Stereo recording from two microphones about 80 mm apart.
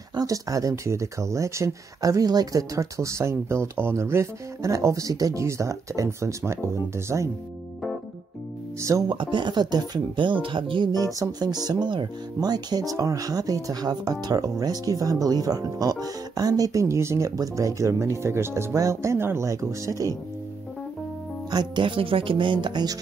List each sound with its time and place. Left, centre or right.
0.1 s speech: right
9.0 s speech: right
10.9 s speech: right
21.5 s speech: right